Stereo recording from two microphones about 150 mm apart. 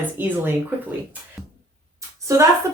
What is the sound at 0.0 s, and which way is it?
Speech, 10° right (ahead or behind).